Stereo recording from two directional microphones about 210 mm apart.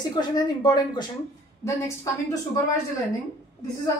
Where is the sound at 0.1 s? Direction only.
20° left (ahead or behind).